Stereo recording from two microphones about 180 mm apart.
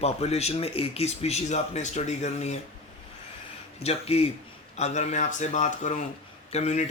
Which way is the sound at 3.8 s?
35° left (ahead or behind).